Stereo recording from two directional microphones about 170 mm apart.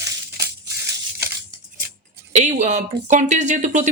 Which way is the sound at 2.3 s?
45° right (ahead or behind).